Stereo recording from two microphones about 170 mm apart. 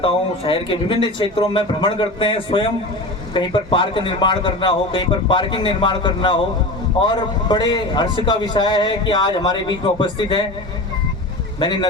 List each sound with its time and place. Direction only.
0.0 s a man's voice: 30° left (ahead or behind)
11.6 s a man's voice: 25° left (ahead or behind)